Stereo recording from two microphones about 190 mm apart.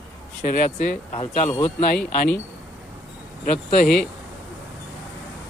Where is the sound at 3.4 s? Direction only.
45° left (ahead or behind).